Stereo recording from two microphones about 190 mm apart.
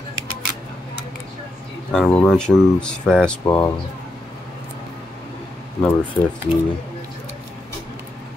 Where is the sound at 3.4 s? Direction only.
15° left (ahead or behind).